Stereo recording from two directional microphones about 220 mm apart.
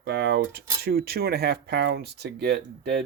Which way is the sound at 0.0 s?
50° right (ahead or behind).